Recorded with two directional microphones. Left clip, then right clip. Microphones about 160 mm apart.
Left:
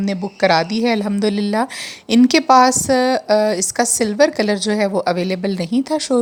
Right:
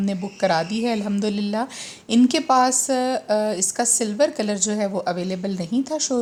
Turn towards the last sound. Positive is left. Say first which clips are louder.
# left 6 dB
turn(degrees=35)  # may be behind; listen again after turning